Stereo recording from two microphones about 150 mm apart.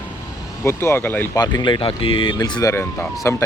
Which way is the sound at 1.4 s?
25° left (ahead or behind).